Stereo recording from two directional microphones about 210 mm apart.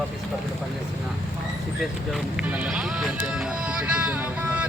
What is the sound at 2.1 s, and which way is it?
Speech, 5° right (ahead or behind).